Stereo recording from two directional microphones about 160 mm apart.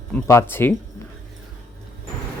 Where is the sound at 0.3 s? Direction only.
15° left (ahead or behind).